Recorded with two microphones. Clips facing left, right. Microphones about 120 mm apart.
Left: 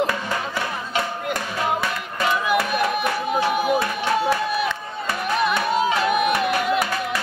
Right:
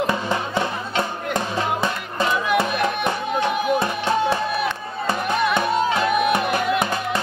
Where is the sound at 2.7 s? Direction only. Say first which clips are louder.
Even; 5° left (ahead or behind).